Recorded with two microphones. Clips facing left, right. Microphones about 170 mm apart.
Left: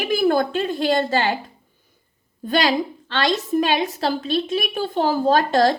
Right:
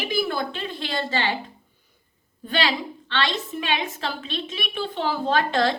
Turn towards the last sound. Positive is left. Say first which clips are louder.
# left 5 dB
turn(degrees=40)  # may be behind; listen again after turning